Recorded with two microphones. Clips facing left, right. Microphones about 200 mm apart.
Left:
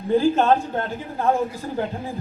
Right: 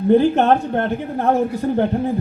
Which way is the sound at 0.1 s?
65° right (ahead or behind).